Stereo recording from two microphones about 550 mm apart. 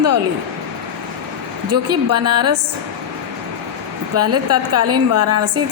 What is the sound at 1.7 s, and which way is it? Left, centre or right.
Speech, right.